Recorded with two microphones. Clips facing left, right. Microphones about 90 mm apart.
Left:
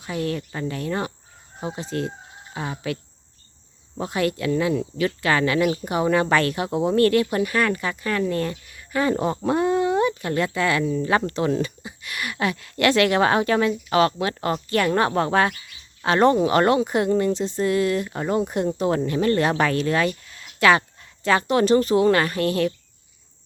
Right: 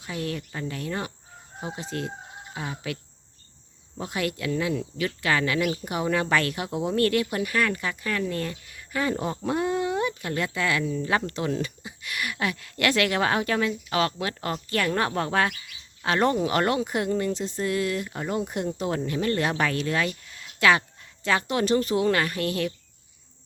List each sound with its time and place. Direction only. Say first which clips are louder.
0.0 s speech: left 5 dB; 40° left (ahead or behind)
4.0 s speech: left 5 dB; 35° left (ahead or behind)